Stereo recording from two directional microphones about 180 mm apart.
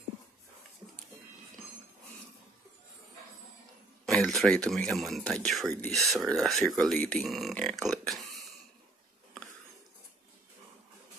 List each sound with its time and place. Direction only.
4.0 s a man's voice: centre (ahead or behind)